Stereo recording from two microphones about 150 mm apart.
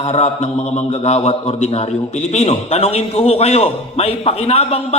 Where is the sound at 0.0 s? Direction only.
45° left (ahead or behind).